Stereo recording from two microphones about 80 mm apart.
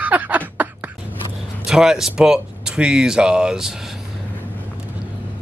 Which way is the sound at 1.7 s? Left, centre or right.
Centre.